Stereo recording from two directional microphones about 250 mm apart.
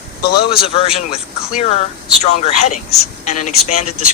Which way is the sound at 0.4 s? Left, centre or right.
Left.